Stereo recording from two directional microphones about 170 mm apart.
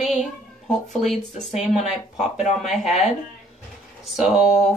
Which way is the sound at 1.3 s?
40° left (ahead or behind).